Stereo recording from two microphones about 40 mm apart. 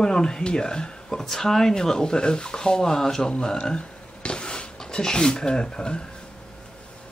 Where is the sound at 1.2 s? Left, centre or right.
Centre.